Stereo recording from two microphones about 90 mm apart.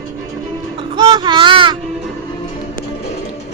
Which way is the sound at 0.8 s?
55° right (ahead or behind).